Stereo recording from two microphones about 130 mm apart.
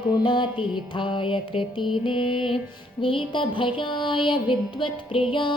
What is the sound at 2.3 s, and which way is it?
Music, 5° right (ahead or behind).